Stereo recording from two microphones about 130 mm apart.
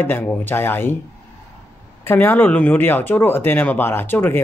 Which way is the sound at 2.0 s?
15° left (ahead or behind).